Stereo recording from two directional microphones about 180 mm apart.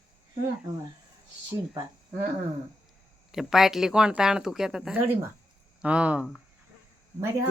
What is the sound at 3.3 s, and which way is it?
Speech, centre (ahead or behind).